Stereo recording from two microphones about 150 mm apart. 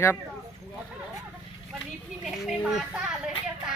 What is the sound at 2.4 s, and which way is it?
Speech, centre (ahead or behind).